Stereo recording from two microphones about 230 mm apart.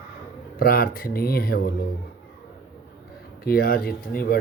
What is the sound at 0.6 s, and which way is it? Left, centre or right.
Speech, left.